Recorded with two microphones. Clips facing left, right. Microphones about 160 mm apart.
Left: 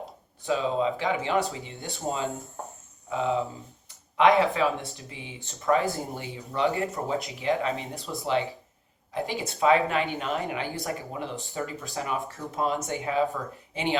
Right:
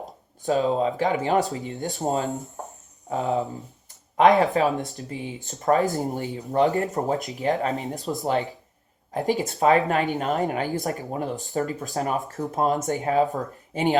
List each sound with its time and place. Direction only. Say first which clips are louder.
0.4 s speech: right 4 dB; 40° right (ahead or behind)
4.5 s speech: right 4 dB; 45° right (ahead or behind)